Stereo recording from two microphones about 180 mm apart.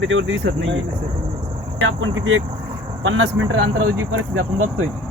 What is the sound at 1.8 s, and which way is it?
Speech, 90° right.